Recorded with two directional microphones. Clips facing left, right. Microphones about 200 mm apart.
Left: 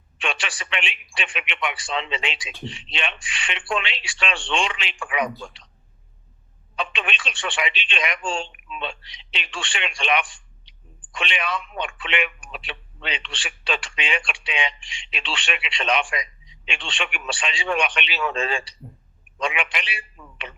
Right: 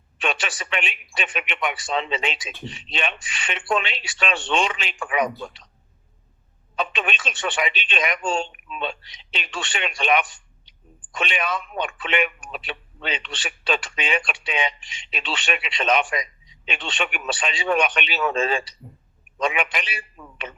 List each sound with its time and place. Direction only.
0.2 s speech: 40° right (ahead or behind)
6.7 s speech: 40° right (ahead or behind)
20.2 s a sound: 50° right (ahead or behind)